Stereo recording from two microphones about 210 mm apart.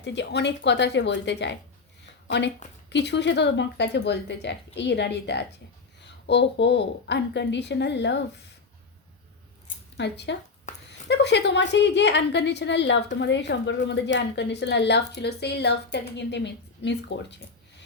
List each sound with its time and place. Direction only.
0.0 s a woman's voice: 55° left (ahead or behind)
10.0 s a woman's voice: 55° left (ahead or behind)